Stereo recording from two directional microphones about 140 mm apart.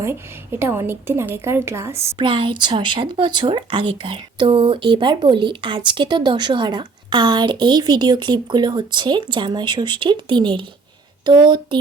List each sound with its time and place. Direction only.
0.0 s a woman's voice: 15° right (ahead or behind)
2.1 s speech: 35° right (ahead or behind)